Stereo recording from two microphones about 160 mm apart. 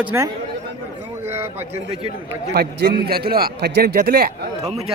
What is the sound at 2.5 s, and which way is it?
A man's voice, 85° right.